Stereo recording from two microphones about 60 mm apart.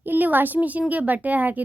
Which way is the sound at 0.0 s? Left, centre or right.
Right.